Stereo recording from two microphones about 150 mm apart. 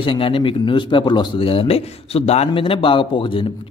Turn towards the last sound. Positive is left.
turn(degrees=35)  # may be behind; listen again after turning